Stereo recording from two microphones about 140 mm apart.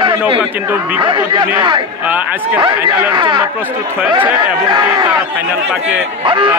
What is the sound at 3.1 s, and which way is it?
Speech, 35° right (ahead or behind).